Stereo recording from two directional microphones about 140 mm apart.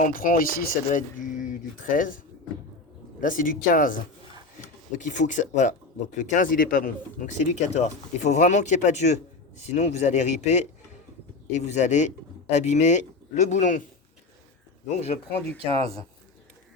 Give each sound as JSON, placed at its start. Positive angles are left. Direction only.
{"t": 0.0, "sound": "speech", "side_deg": 80}
{"t": 4.9, "sound": "speech", "side_deg": 60}
{"t": 14.8, "sound": "speech", "side_deg": 50}